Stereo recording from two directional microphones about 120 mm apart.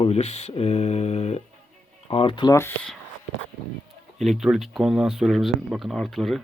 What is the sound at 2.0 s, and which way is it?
Speech, 50° left (ahead or behind).